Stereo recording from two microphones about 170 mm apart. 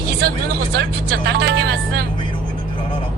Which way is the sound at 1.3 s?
75° right (ahead or behind).